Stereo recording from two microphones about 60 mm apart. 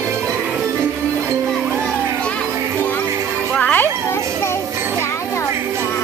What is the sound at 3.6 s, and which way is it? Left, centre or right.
Music, left.